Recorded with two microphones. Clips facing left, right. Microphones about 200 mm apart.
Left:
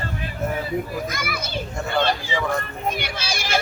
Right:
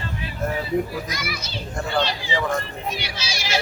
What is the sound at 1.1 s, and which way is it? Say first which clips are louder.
Speech: left 2 dB; 50° left (ahead or behind).